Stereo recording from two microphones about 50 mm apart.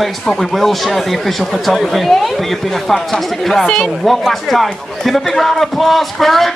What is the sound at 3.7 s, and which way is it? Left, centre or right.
Speech, centre.